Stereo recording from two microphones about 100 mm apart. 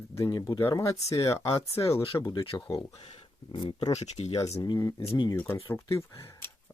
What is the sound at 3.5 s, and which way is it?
Speech, 50° left (ahead or behind).